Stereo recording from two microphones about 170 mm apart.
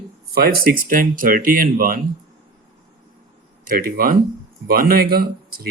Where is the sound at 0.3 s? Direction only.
60° right (ahead or behind).